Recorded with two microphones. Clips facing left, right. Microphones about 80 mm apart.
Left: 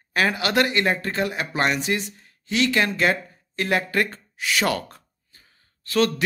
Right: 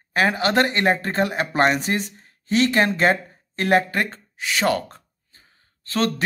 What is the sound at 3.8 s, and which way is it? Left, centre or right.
Speech, right.